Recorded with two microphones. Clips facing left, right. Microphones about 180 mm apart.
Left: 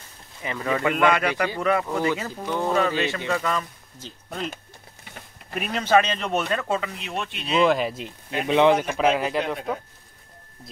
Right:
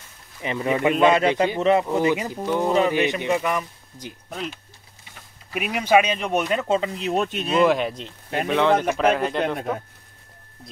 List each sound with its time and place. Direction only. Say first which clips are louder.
0.4 s speech: right 3 dB; 20° right (ahead or behind)
5.5 s speech: right 2 dB; 10° right (ahead or behind); by 7.5 s 45° right (ahead or behind)
7.6 s speech: even; centre (ahead or behind)
8.5 s a man's voice: left 2 dB; 15° left (ahead or behind)
8.9 s speech: right 1 dB; 5° left (ahead or behind)